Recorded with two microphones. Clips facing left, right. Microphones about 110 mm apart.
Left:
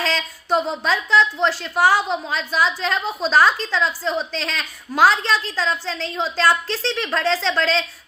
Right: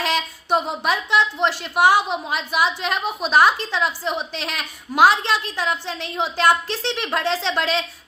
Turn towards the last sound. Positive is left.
turn(degrees=-15)  # may be behind; listen again after turning